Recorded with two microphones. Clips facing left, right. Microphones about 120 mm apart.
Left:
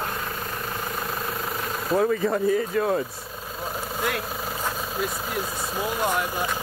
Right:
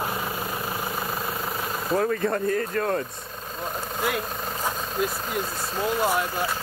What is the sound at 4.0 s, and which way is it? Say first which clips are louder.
Speech: right 1 dB; centre (ahead or behind).